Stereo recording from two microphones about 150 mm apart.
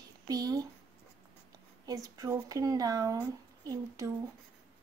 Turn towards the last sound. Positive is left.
turn(degrees=-25)  # may be behind; listen again after turning